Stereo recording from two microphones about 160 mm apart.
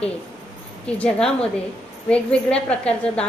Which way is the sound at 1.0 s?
5° left (ahead or behind).